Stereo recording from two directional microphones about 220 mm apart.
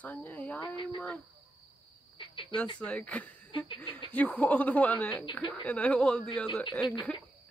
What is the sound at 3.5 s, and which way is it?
Speech, 20° left (ahead or behind).